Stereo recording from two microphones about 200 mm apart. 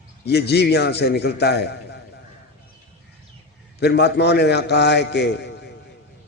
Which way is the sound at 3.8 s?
55° left (ahead or behind).